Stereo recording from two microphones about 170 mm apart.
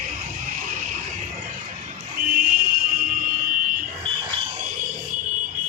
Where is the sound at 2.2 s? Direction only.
55° right (ahead or behind).